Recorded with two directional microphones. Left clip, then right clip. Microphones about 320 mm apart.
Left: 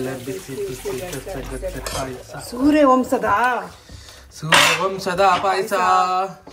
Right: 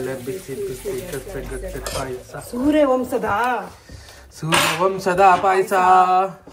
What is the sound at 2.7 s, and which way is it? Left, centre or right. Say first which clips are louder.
Speech: left 2 dB; left.